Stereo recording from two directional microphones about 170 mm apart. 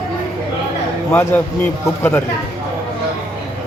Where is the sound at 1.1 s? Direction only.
15° left (ahead or behind).